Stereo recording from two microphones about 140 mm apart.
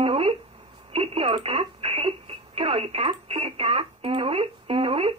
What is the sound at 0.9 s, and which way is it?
Speech, 45° right (ahead or behind).